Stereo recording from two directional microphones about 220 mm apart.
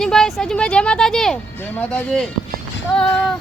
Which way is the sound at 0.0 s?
Centre (ahead or behind).